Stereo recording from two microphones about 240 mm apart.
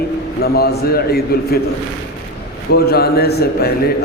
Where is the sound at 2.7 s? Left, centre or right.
Left.